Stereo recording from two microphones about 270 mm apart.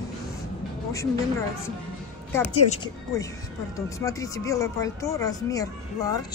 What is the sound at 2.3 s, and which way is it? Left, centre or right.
Speech, centre.